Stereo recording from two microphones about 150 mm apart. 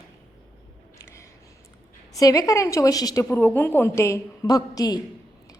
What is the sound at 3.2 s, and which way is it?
A woman's voice, 10° left (ahead or behind).